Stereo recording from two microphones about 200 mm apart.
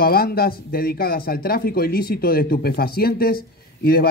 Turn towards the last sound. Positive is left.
turn(degrees=50)  # may be behind; listen again after turning